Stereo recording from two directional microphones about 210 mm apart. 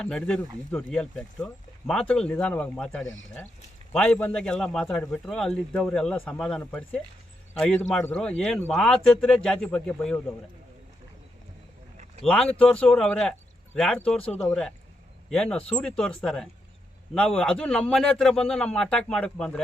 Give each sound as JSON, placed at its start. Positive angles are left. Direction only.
{"t": 0.0, "sound": "a man's voice", "side_deg": 5}
{"t": 12.2, "sound": "a man's voice", "side_deg": 5}
{"t": 15.3, "sound": "a man's voice", "side_deg": 5}